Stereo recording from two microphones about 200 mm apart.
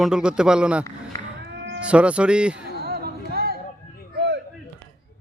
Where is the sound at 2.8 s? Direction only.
50° right (ahead or behind).